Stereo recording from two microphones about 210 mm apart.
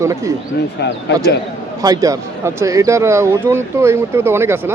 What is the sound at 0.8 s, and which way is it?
Speech, 55° left (ahead or behind).